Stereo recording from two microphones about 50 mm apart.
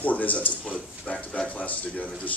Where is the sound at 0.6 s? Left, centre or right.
Left.